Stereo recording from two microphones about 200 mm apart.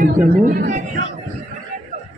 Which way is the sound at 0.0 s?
45° right (ahead or behind).